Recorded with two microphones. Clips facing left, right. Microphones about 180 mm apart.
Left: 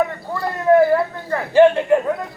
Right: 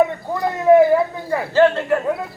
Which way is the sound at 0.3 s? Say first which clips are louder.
Right 2 dB; 15° right (ahead or behind).